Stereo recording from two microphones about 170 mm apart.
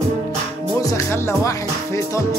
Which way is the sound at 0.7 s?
20° left (ahead or behind).